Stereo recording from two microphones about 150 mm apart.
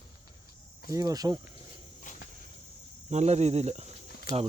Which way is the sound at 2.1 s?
60° left (ahead or behind).